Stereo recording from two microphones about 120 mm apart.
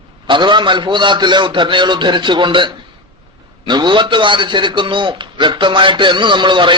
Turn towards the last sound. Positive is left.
turn(degrees=-40)  # may be behind; listen again after turning